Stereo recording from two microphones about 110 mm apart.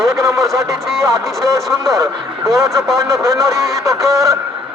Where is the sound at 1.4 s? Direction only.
30° right (ahead or behind).